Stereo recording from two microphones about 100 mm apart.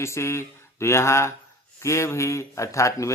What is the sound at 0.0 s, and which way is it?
Speech, 30° left (ahead or behind).